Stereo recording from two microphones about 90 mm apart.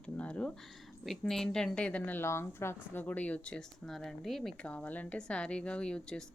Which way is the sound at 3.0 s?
15° left (ahead or behind).